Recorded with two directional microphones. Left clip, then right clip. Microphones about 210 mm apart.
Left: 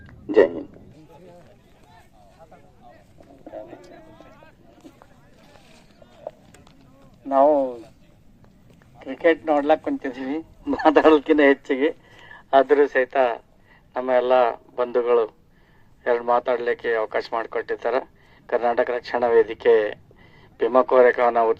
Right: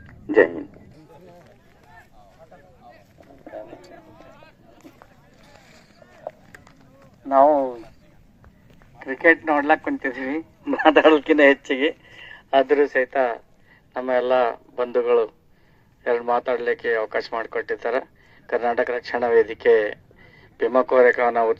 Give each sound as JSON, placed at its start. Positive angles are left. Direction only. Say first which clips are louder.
{"t": 0.3, "sound": "speech", "louder": "even", "side_deg": 65}
{"t": 2.9, "sound": "a sound", "louder": "right 1 dB", "side_deg": -5}
{"t": 7.3, "sound": "speech", "louder": "right 1 dB", "side_deg": 20}
{"t": 9.4, "sound": "a man's voice", "louder": "even", "side_deg": 50}